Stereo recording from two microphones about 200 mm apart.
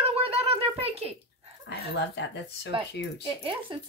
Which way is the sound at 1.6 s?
60° left (ahead or behind).